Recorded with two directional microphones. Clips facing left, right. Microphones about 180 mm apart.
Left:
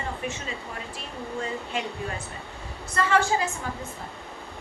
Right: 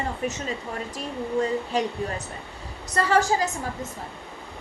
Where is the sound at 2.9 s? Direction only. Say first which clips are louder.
Right 2 dB; 40° right (ahead or behind).